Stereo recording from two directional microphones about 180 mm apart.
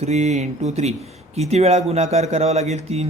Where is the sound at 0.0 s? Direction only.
40° right (ahead or behind).